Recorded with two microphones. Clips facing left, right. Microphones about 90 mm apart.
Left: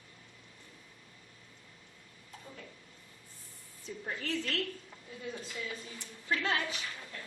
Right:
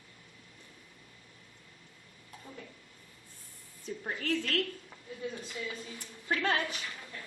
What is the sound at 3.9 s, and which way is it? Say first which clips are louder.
Speech: right 4 dB; 50° right (ahead or behind).